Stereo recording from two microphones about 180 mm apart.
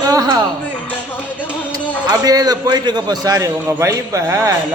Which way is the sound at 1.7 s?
20° right (ahead or behind).